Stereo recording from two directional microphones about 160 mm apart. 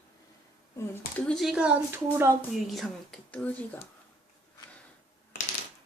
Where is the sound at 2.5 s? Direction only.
Centre (ahead or behind).